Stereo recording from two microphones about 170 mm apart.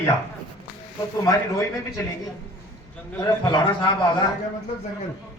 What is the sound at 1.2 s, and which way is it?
Speech, 20° left (ahead or behind).